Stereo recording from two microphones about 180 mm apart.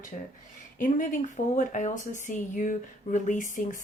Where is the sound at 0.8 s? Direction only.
50° left (ahead or behind).